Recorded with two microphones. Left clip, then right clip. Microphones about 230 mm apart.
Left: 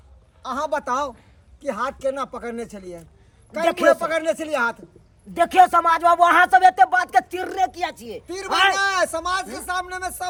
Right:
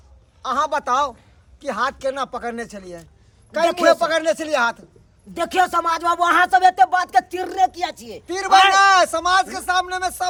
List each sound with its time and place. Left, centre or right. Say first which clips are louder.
0.4 s speech: right 4 dB; centre
3.6 s speech: right 2 dB; centre
4.0 s speech: right 3 dB; centre
5.3 s speech: left 4 dB; centre
8.7 s speech: right 7 dB; centre